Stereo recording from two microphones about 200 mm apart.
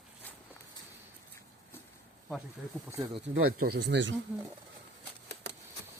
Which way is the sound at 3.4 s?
55° right (ahead or behind).